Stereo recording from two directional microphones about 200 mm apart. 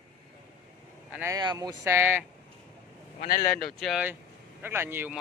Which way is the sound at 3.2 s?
50° left (ahead or behind).